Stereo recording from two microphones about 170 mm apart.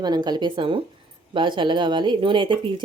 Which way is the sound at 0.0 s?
25° right (ahead or behind).